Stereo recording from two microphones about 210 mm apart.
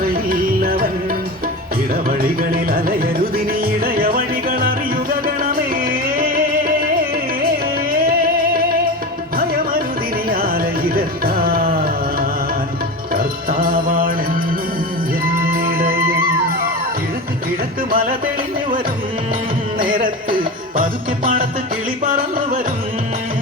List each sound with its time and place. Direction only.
0.1 s music: 45° right (ahead or behind)
2.0 s music: 45° right (ahead or behind)
7.9 s music: 45° right (ahead or behind)
10.2 s music: 45° right (ahead or behind)
13.1 s music: 45° right (ahead or behind)
15.4 s music: 45° right (ahead or behind)
17.9 s music: 40° right (ahead or behind)
19.8 s music: 40° right (ahead or behind)
22.0 s a sound: 40° right (ahead or behind)